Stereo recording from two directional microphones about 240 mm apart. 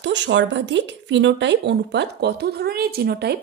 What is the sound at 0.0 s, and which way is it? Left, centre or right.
Speech, right.